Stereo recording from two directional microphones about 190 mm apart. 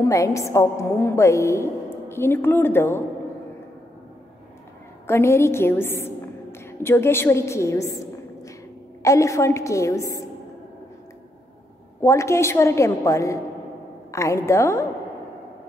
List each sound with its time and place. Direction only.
0.0 s a woman's voice: 15° left (ahead or behind)
5.0 s a woman's voice: 15° left (ahead or behind)
12.0 s a woman's voice: 15° left (ahead or behind)